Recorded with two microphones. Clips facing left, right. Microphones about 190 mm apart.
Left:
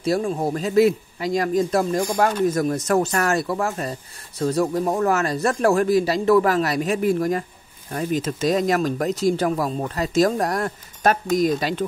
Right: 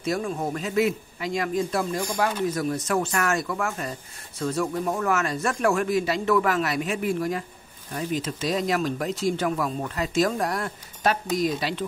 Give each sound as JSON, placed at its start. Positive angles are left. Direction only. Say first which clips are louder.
{"t": 0.0, "sound": "a man's voice", "louder": "left 5 dB", "side_deg": 30}